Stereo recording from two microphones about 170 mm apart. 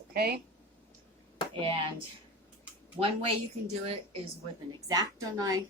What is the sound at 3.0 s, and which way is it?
Speech, 25° right (ahead or behind).